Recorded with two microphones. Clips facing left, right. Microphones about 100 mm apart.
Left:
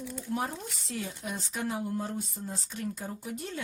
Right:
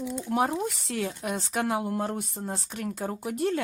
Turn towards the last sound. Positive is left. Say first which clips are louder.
# right 10 dB
turn(degrees=-70)  # may be behind; listen again after turning